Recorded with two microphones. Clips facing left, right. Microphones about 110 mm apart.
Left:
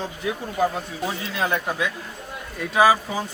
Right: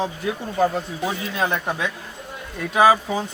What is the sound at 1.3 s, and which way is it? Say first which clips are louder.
Speech: even; 20° right (ahead or behind).